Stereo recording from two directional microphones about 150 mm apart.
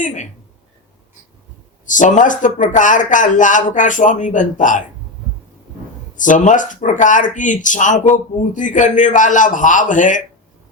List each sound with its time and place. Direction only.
0.0 s speech: 55° left (ahead or behind)
1.9 s speech: 60° left (ahead or behind)
6.1 s speech: 60° left (ahead or behind)